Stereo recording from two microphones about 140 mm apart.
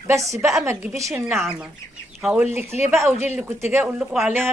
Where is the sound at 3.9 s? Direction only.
5° right (ahead or behind).